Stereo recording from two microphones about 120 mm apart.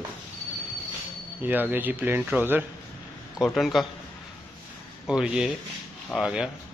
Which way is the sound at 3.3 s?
Centre (ahead or behind).